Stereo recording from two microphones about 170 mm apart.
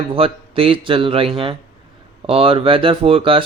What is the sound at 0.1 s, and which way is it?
Speech, 35° right (ahead or behind).